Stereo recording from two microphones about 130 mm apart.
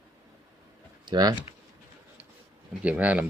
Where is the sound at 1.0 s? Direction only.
30° right (ahead or behind).